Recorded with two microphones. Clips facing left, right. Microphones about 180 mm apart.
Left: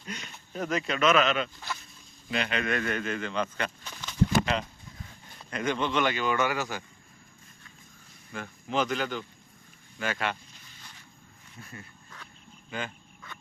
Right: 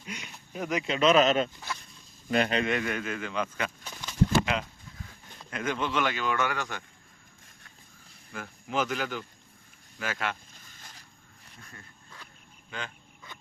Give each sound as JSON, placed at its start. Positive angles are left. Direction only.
{"t": 0.0, "sound": "a sound", "side_deg": -10}
{"t": 0.9, "sound": "speech", "side_deg": -35}
{"t": 2.6, "sound": "speech", "side_deg": -20}
{"t": 2.8, "sound": "speech", "side_deg": -5}
{"t": 8.3, "sound": "speech", "side_deg": -5}
{"t": 11.6, "sound": "speech", "side_deg": 5}